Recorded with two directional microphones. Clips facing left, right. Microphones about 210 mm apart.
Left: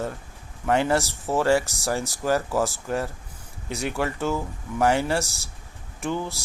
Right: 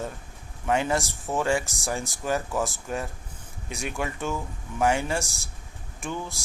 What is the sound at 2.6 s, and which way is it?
Speech, 15° right (ahead or behind).